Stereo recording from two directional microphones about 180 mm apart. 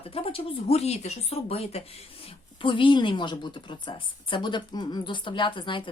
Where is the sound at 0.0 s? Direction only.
30° left (ahead or behind).